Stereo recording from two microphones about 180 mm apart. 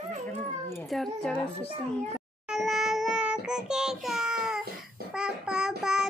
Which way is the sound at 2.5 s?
Centre (ahead or behind).